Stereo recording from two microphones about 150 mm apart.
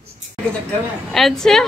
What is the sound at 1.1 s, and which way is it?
Speech, centre (ahead or behind).